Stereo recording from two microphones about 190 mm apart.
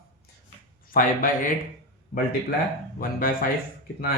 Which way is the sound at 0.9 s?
45° left (ahead or behind).